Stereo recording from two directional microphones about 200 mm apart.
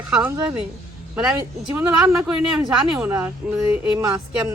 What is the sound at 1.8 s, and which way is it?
A woman's voice, 5° right (ahead or behind).